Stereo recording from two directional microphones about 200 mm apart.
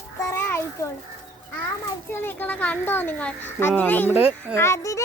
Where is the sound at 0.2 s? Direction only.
15° left (ahead or behind).